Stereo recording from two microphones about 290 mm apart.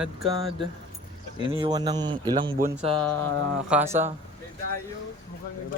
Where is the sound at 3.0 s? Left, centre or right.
Centre.